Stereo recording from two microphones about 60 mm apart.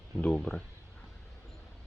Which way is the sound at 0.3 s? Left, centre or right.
Left.